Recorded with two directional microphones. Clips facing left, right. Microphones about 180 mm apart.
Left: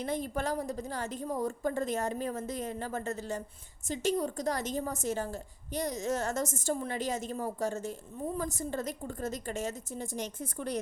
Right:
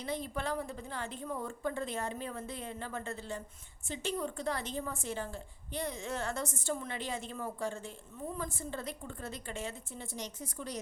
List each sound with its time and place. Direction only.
0.0 s a woman's voice: 50° left (ahead or behind)